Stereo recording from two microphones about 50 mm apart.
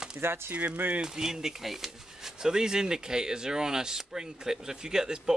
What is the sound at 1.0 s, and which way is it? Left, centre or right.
Speech, centre.